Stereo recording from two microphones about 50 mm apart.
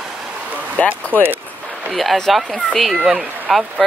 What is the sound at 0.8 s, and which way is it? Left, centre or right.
Speech, left.